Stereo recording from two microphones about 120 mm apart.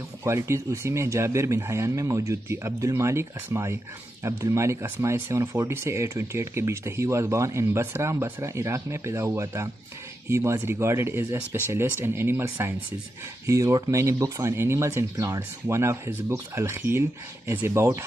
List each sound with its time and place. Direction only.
0.2 s speech: 25° right (ahead or behind)